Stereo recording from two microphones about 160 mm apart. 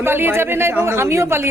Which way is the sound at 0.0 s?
15° right (ahead or behind).